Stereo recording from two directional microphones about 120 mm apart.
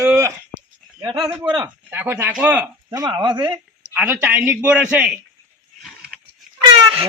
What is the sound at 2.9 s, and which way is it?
Speech, 30° right (ahead or behind).